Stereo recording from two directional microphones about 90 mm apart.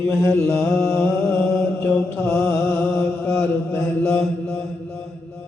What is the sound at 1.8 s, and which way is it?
Mantra, 25° left (ahead or behind).